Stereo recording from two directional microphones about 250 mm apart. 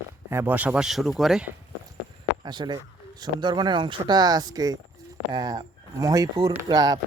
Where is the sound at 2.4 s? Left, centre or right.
Centre.